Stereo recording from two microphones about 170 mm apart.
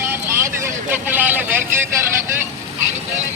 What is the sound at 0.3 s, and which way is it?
Vehicle, 15° right (ahead or behind).